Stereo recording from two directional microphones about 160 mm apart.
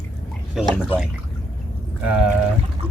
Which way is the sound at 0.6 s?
5° right (ahead or behind).